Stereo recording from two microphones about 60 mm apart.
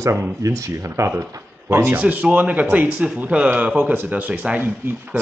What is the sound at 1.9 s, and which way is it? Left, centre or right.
Speech, right.